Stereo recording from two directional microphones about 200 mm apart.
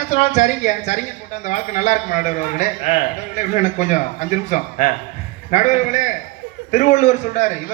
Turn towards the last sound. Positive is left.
turn(degrees=35)  # may be behind; listen again after turning